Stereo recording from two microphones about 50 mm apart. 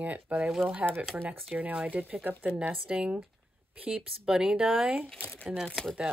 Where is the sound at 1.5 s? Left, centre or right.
Right.